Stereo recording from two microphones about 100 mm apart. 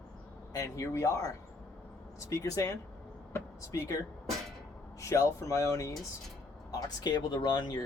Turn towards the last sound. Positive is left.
turn(degrees=45)  # may be behind; listen again after turning